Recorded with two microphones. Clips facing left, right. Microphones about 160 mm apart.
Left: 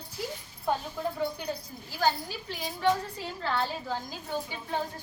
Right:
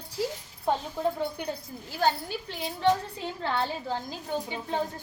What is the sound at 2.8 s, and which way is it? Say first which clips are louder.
A woman's voice: right 2 dB; 20° right (ahead or behind).